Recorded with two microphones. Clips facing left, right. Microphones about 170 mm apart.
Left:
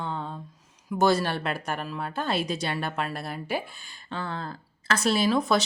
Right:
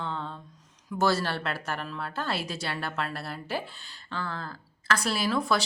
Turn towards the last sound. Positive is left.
turn(degrees=20)  # may be behind; listen again after turning